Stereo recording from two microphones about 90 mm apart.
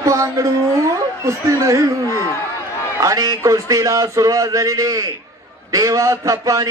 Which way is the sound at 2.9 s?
40° right (ahead or behind).